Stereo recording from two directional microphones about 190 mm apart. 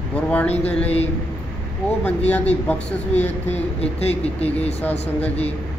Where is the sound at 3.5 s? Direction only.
30° left (ahead or behind).